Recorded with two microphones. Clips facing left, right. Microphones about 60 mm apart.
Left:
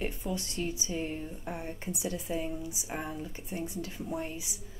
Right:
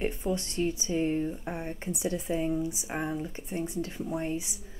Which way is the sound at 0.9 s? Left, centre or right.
Right.